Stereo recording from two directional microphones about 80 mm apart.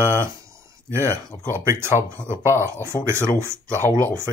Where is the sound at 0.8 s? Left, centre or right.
Right.